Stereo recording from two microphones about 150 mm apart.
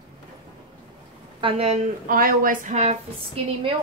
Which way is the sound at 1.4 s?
45° right (ahead or behind).